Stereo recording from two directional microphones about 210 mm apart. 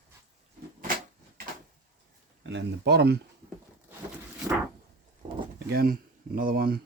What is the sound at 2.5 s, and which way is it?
Speech, 50° right (ahead or behind).